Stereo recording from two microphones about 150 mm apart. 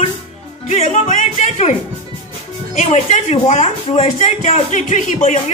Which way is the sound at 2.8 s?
50° left (ahead or behind).